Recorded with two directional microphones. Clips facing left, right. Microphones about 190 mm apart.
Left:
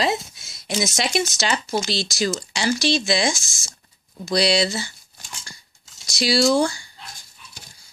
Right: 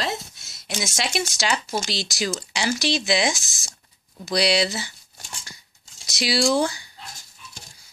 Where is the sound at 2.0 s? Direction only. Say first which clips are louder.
Left 3 dB; 15° right (ahead or behind).